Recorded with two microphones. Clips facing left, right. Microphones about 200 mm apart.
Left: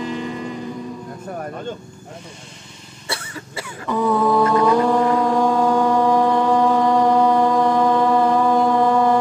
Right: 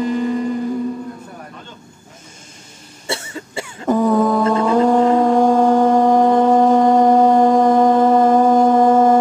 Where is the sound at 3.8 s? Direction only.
45° right (ahead or behind).